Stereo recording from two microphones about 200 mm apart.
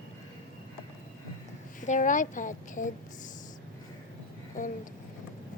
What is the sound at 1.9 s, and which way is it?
A woman's voice, 40° left (ahead or behind).